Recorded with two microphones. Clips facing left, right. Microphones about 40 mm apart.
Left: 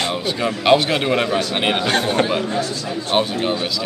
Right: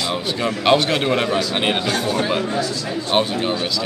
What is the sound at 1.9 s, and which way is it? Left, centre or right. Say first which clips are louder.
Speech: left 3 dB; left.